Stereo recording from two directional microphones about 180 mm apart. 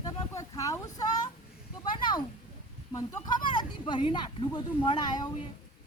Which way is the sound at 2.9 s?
20° left (ahead or behind).